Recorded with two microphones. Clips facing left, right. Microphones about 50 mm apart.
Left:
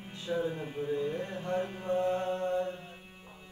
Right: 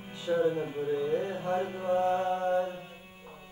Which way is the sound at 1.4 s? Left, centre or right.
Centre.